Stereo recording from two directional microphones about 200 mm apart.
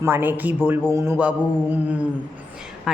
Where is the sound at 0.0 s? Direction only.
10° right (ahead or behind).